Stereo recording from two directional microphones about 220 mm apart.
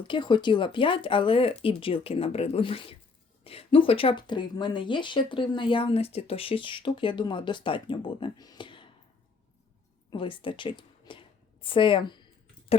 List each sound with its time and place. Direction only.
0.1 s speech: 20° left (ahead or behind)
10.1 s speech: 25° left (ahead or behind)